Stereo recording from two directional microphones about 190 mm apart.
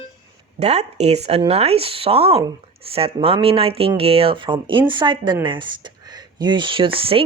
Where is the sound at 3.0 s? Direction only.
30° right (ahead or behind).